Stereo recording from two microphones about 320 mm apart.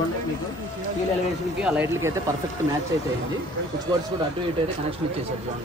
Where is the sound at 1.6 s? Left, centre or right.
Centre.